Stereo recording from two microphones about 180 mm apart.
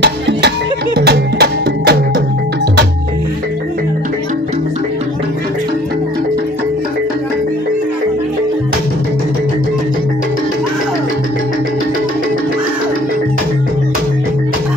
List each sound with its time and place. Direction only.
0.9 s music: 65° right (ahead or behind)